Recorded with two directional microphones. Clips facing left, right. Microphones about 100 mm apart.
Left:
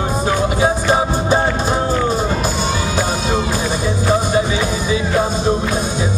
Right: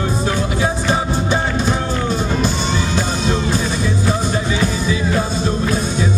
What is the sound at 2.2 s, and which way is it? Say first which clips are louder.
Music: left 1 dB; 5° left (ahead or behind).